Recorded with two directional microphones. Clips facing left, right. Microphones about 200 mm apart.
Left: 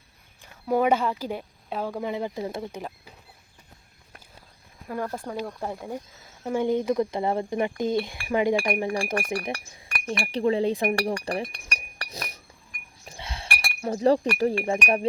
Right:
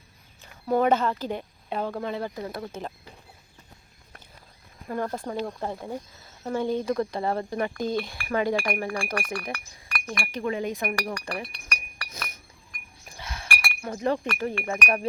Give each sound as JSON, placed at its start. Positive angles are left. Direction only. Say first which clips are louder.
{"t": 0.7, "sound": "speech", "louder": "even", "side_deg": 10}
{"t": 2.7, "sound": "speech", "louder": "even", "side_deg": 10}
{"t": 4.9, "sound": "speech", "louder": "right 1 dB", "side_deg": 5}
{"t": 11.7, "sound": "chink", "louder": "left 2 dB", "side_deg": 35}
{"t": 14.3, "sound": "speech", "louder": "left 5 dB", "side_deg": 30}